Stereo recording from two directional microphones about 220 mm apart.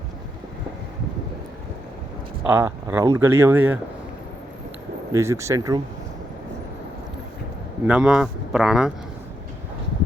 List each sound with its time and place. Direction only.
2.5 s speech: 10° right (ahead or behind)
5.1 s speech: 15° right (ahead or behind)
7.9 s speech: 5° right (ahead or behind)